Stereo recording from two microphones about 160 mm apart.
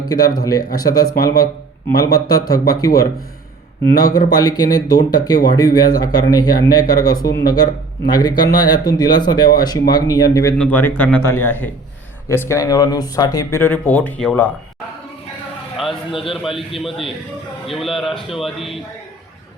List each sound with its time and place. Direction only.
0.3 s speech: 25° left (ahead or behind)
10.6 s speech: 10° left (ahead or behind)
15.9 s a man's voice: 35° left (ahead or behind)
17.7 s a man's voice: centre (ahead or behind)